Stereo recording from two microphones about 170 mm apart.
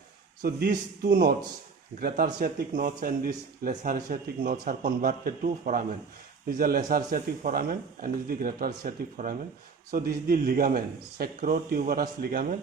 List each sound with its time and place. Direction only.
0.4 s speech: 65° right (ahead or behind)